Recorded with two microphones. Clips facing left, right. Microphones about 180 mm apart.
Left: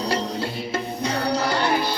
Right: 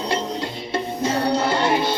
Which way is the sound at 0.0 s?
20° right (ahead or behind).